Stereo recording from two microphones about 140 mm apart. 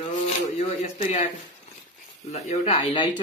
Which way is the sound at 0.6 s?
55° left (ahead or behind).